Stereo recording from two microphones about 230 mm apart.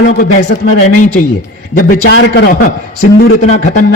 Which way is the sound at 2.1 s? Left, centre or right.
Left.